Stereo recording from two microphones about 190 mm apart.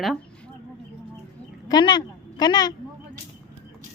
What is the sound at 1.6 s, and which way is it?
A woman's voice, 20° left (ahead or behind).